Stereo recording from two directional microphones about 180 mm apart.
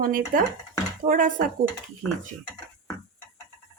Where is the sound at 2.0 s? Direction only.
20° left (ahead or behind).